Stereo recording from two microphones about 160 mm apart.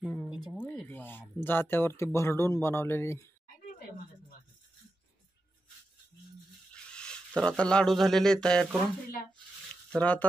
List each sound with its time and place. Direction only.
0.6 s speech: 10° left (ahead or behind)
6.7 s speech: 5° left (ahead or behind)
9.9 s speech: 10° left (ahead or behind)